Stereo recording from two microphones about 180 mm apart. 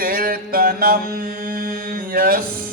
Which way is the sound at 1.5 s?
55° right (ahead or behind).